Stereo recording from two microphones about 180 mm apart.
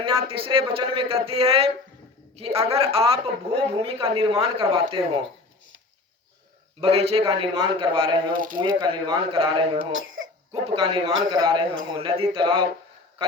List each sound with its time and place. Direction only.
0.3 s speech: 30° right (ahead or behind)
6.8 s a man's voice: 35° right (ahead or behind)
8.3 s speech: 50° right (ahead or behind)
8.6 s a man's voice: 25° right (ahead or behind)